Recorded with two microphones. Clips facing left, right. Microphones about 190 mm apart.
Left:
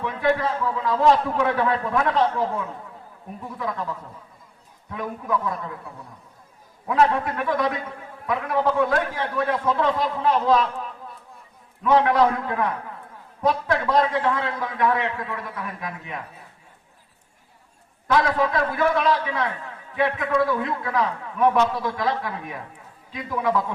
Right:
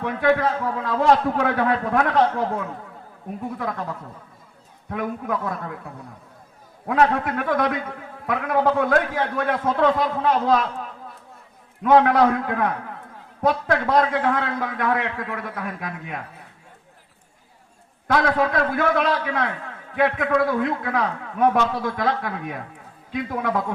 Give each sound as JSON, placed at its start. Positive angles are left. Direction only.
{"t": 0.0, "sound": "a man's voice", "side_deg": -55}
{"t": 6.8, "sound": "a man's voice", "side_deg": -60}
{"t": 11.8, "sound": "a man's voice", "side_deg": -50}
{"t": 18.1, "sound": "a man's voice", "side_deg": -60}